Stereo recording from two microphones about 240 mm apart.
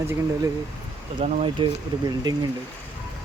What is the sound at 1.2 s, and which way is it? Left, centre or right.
Speech, right.